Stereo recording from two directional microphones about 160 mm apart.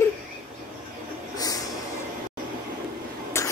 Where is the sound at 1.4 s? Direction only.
20° left (ahead or behind).